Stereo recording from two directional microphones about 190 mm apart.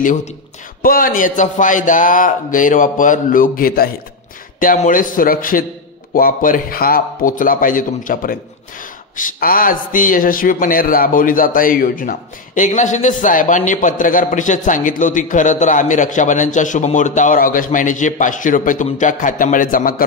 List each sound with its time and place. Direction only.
0.0 s a man's voice: 40° left (ahead or behind)